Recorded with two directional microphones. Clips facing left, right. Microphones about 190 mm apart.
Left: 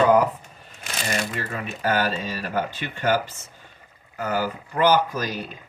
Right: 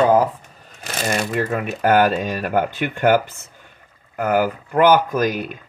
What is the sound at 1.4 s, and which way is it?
Speech, 55° right (ahead or behind).